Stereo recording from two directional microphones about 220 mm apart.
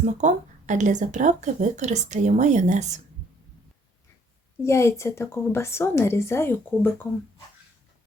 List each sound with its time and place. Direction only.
0.0 s speech: 35° right (ahead or behind)
4.6 s a woman's voice: 10° left (ahead or behind)